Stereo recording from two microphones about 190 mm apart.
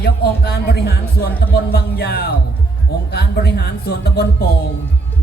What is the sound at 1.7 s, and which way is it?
Music, 55° left (ahead or behind).